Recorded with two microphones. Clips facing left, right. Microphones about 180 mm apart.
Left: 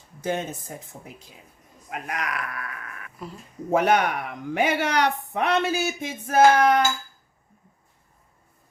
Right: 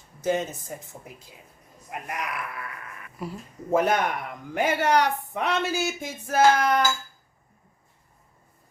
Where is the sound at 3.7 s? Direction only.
70° left (ahead or behind).